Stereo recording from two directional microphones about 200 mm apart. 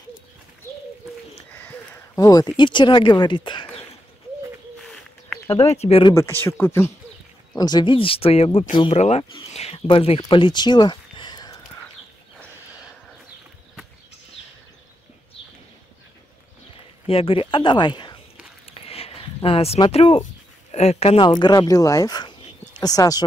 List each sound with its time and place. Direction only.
1.5 s speech: 10° left (ahead or behind); by 3.8 s 25° left (ahead or behind)
4.8 s bird: centre (ahead or behind)
5.5 s speech: 30° left (ahead or behind)
6.1 s speech: 10° left (ahead or behind)
17.1 s speech: 25° left (ahead or behind)
18.7 s a sound: 30° left (ahead or behind)
20.7 s speech: 35° left (ahead or behind); by 23.2 s 20° left (ahead or behind)